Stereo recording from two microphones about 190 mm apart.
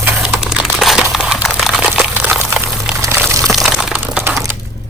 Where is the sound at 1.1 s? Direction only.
5° right (ahead or behind).